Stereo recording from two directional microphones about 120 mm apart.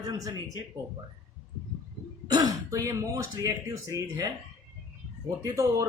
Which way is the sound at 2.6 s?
25° right (ahead or behind).